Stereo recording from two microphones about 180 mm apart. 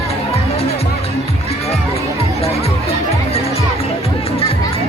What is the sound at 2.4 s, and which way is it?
Music, 35° left (ahead or behind).